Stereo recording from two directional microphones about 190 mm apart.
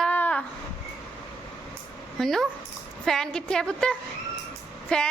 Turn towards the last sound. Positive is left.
turn(degrees=5)  # may be behind; listen again after turning